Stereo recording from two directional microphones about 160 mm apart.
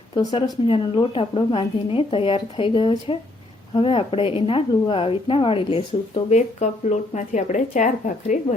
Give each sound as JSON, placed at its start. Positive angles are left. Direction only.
{"t": 0.1, "sound": "a woman's voice", "side_deg": 25}